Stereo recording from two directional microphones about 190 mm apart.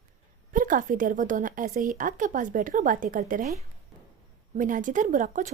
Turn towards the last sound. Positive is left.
turn(degrees=-40)  # may be behind; listen again after turning